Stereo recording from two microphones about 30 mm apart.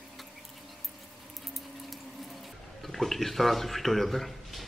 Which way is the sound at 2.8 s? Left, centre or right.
Centre.